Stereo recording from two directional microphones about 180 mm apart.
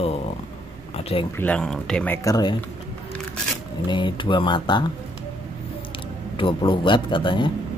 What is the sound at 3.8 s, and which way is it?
Speech, 25° left (ahead or behind).